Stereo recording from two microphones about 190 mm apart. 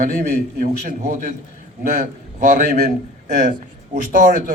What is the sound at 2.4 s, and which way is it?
Speech, 45° right (ahead or behind).